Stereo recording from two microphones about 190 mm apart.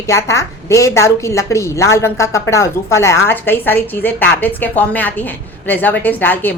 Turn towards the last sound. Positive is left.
turn(degrees=10)  # may be behind; listen again after turning